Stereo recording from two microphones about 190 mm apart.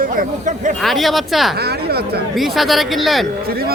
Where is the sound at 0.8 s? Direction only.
Centre (ahead or behind).